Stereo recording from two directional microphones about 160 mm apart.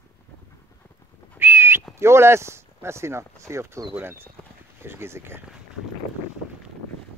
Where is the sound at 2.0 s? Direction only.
15° right (ahead or behind).